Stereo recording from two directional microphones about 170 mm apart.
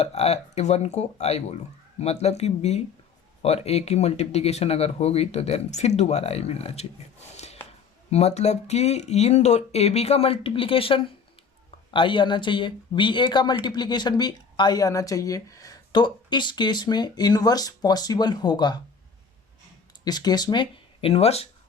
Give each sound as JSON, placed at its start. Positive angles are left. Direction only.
{"t": 0.0, "sound": "speech", "side_deg": 40}
{"t": 7.3, "sound": "a sound", "side_deg": 40}
{"t": 8.1, "sound": "speech", "side_deg": 40}
{"t": 20.1, "sound": "speech", "side_deg": 25}